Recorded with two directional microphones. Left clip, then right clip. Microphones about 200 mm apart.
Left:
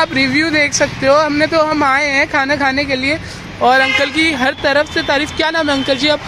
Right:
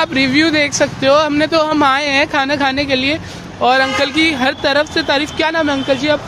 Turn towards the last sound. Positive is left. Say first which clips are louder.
# left 1 dB
turn(degrees=15)  # may be behind; listen again after turning